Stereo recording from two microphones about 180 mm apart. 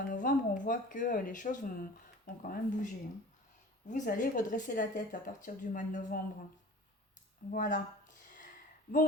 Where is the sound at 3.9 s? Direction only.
45° left (ahead or behind).